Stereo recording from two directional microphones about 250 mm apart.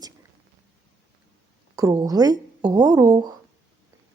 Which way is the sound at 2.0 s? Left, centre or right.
Centre.